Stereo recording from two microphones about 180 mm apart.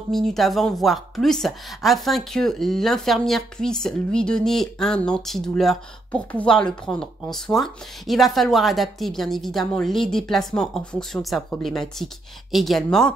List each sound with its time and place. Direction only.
0.3 s speech: centre (ahead or behind)